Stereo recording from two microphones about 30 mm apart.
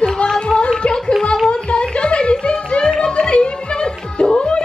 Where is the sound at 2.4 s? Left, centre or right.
Left.